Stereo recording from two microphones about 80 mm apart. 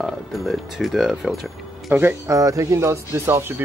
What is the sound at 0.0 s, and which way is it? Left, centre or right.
Speech, centre.